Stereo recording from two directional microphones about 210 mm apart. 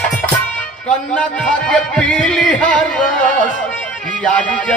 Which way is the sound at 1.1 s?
5° left (ahead or behind).